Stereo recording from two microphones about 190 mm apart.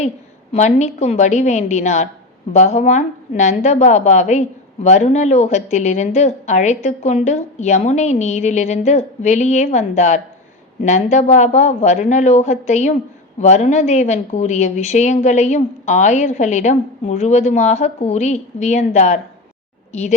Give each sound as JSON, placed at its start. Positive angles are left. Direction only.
{"t": 0.5, "sound": "a woman's voice", "side_deg": 35}